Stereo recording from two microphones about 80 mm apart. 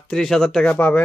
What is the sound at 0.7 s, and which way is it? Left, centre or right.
Speech, centre.